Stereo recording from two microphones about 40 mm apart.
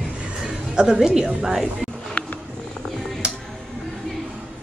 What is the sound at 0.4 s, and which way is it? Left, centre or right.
A woman's voice, centre.